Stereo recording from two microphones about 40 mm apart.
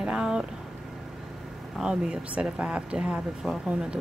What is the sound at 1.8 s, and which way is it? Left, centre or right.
Speech, centre.